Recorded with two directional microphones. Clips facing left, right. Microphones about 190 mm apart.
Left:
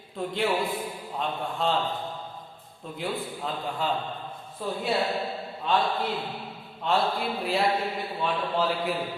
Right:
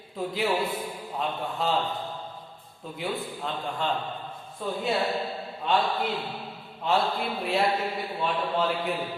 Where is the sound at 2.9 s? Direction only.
Centre (ahead or behind).